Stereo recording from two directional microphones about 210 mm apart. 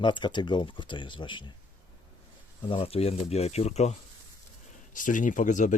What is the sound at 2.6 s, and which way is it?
Speech, 25° left (ahead or behind).